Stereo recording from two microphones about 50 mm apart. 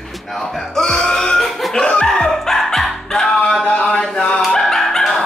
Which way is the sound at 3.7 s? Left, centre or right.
Left.